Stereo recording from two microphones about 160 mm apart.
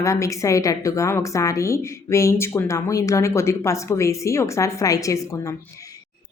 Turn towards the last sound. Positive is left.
turn(degrees=20)  # may be behind; listen again after turning